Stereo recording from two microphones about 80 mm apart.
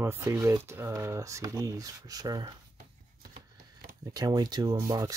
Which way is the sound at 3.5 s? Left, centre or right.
Right.